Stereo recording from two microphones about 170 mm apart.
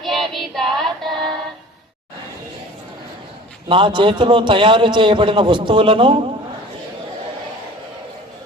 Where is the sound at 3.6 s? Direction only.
30° right (ahead or behind).